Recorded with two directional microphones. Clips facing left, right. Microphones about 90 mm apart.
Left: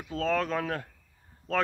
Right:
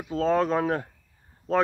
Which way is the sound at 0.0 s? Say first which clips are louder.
Right 5 dB; 25° right (ahead or behind).